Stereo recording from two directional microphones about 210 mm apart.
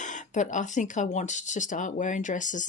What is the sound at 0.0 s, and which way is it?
Speech, 35° left (ahead or behind).